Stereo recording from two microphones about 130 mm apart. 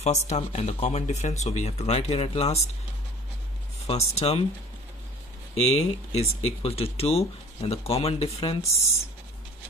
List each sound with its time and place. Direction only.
0.0 s speech: 60° left (ahead or behind)
3.8 s speech: 55° left (ahead or behind)
5.7 s speech: 55° left (ahead or behind)